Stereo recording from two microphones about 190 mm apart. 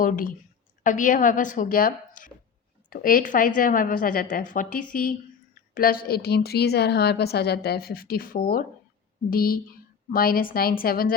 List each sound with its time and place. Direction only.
0.0 s a woman's voice: 45° left (ahead or behind)